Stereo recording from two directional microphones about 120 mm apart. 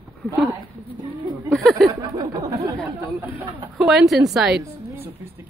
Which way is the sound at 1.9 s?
30° right (ahead or behind).